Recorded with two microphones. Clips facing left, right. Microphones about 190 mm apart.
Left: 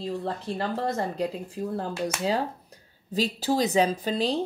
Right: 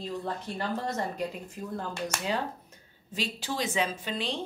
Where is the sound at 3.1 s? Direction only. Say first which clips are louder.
Left 8 dB; 40° left (ahead or behind).